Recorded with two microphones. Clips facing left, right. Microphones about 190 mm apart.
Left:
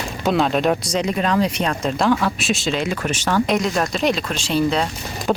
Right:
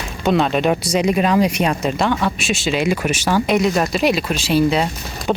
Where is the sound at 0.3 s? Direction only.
Centre (ahead or behind).